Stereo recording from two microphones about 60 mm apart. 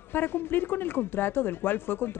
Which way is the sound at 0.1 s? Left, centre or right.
Left.